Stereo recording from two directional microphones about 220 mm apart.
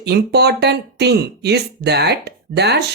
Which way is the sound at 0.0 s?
50° right (ahead or behind).